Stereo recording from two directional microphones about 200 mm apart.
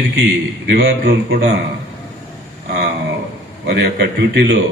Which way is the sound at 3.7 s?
55° right (ahead or behind).